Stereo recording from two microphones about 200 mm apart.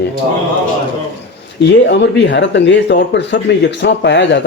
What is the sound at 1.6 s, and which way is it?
Speech, 60° left (ahead or behind).